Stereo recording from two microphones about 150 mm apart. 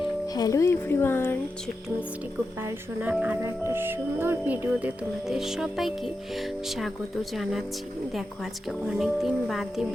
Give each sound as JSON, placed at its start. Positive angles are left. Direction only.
{"t": 0.0, "sound": "speech", "side_deg": 25}
{"t": 2.6, "sound": "speech", "side_deg": -10}
{"t": 8.9, "sound": "speech", "side_deg": -5}